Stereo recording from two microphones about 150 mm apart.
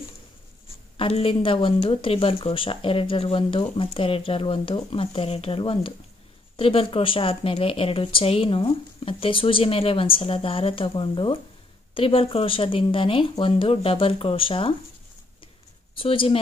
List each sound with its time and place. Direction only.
0.9 s speech: 40° left (ahead or behind)
16.0 s speech: 35° left (ahead or behind)